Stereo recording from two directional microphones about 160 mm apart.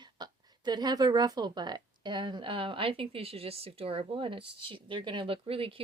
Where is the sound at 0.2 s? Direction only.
25° right (ahead or behind).